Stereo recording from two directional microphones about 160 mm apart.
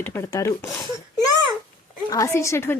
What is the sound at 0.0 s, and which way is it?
Speech, 15° left (ahead or behind).